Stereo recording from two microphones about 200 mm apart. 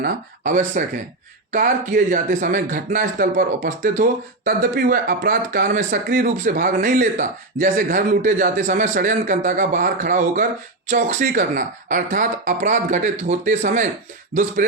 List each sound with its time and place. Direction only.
0.0 s speech: 40° right (ahead or behind)